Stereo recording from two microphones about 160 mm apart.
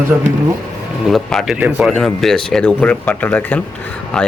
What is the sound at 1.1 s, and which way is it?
Speech, centre (ahead or behind).